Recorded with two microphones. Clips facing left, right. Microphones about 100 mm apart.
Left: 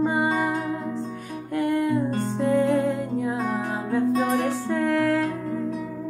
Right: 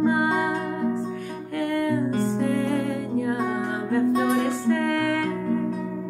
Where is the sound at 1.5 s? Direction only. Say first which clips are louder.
Left 1 dB; 20° left (ahead or behind).